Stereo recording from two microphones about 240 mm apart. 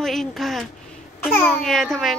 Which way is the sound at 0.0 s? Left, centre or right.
Centre.